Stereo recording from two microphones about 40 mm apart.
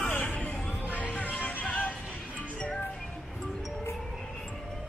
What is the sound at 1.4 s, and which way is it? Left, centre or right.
Music, left.